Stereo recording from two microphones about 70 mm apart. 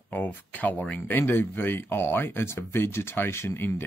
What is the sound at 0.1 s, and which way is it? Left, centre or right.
Speech, left.